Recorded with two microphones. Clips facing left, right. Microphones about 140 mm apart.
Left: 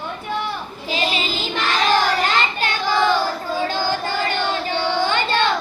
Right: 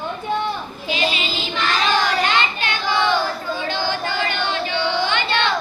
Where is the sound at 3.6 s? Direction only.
40° left (ahead or behind).